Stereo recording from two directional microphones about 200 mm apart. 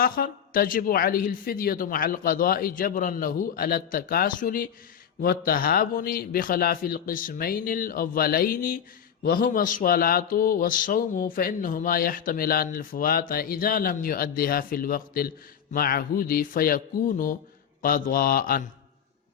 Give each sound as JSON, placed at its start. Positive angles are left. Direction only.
{"t": 0.0, "sound": "a man's voice", "side_deg": 45}